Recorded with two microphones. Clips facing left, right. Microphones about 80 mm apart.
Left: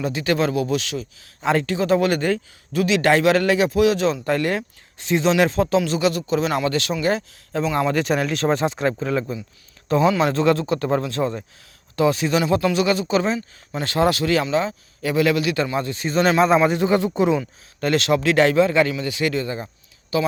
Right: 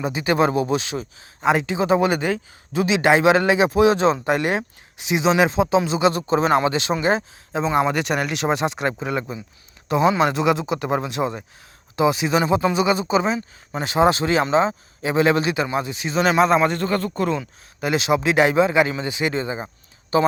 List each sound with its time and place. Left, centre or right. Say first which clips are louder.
0.0 s speech: right 2 dB; centre
1.4 s speech: right 1 dB; centre
2.7 s speech: even; right
6.7 s speech: right 1 dB; right
15.5 s speech: even; centre
16.0 s a man's voice: left 1 dB; centre
16.8 s a man's voice: left 4 dB; centre
17.4 s speech: left 2 dB; centre
19.6 s a sound: right 3 dB; right